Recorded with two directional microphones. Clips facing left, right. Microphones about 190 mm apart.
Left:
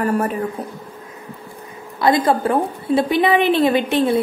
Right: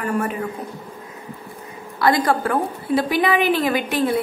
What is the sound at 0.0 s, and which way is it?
Speech, 35° left (ahead or behind).